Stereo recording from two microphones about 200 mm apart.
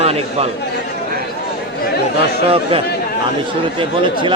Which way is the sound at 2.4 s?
30° right (ahead or behind).